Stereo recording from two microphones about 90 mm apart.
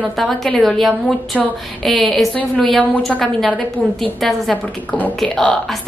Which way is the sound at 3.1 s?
10° left (ahead or behind).